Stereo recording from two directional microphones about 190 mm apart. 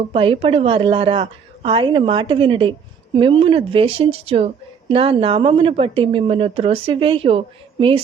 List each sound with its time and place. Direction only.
0.1 s a woman's voice: 30° right (ahead or behind)